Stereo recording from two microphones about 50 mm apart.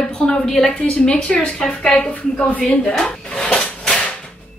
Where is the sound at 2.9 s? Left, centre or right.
Centre.